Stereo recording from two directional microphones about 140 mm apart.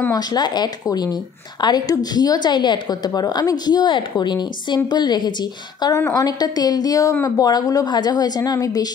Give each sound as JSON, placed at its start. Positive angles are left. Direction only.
{"t": 0.1, "sound": "speech", "side_deg": 30}